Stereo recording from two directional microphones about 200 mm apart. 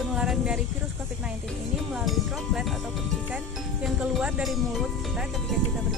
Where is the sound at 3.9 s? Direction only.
Centre (ahead or behind).